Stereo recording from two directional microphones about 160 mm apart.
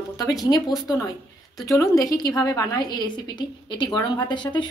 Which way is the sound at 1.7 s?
20° left (ahead or behind).